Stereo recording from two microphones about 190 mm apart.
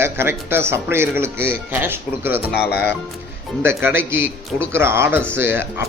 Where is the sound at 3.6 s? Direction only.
10° right (ahead or behind).